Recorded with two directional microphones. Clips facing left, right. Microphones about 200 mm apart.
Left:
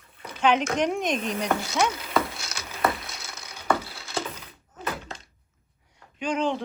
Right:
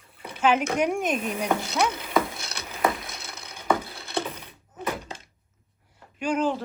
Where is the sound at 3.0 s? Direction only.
60° right (ahead or behind).